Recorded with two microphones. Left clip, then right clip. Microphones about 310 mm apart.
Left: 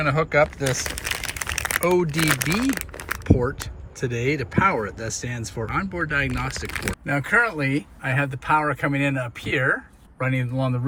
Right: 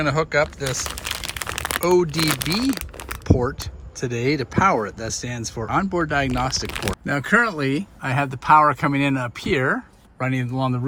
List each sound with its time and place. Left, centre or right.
0.0 s speech: centre
1.0 s crumpling: centre
1.6 s speech: centre
7.0 s a man's voice: centre